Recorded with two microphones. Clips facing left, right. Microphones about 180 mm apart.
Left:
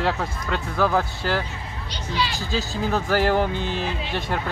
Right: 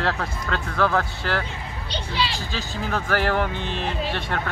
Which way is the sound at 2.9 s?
10° left (ahead or behind).